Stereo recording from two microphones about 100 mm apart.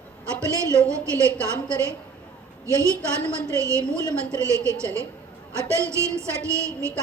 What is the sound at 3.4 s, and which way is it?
A woman's voice, 30° right (ahead or behind).